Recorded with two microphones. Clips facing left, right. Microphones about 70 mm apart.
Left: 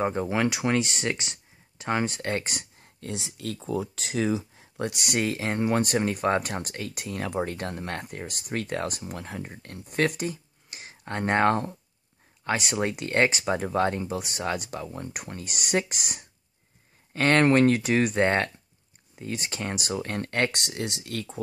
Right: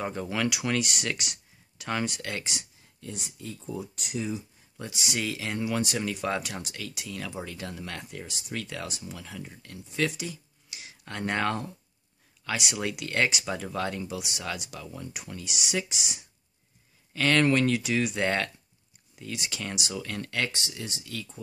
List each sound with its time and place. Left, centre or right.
0.0 s speech: left
3.1 s speech: left
17.1 s speech: left
20.5 s speech: left